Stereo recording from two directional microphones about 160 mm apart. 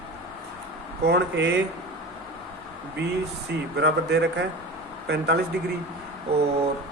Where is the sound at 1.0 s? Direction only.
90° right.